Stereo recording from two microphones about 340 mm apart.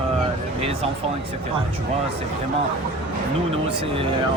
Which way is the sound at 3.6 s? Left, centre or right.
Centre.